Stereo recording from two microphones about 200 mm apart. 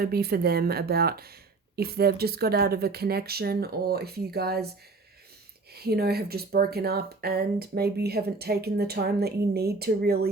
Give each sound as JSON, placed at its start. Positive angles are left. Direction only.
{"t": 0.0, "sound": "speech", "side_deg": -50}
{"t": 5.7, "sound": "speech", "side_deg": -50}